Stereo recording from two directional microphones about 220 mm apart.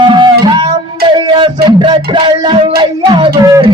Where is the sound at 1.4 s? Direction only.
20° right (ahead or behind).